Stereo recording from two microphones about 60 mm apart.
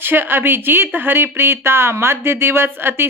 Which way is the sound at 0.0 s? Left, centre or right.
Right.